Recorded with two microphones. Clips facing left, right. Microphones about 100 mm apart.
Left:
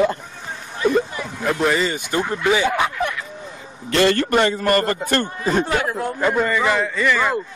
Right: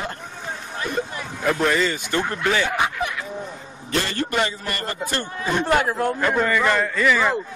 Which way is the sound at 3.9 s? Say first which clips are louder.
Left 8 dB; 90° left.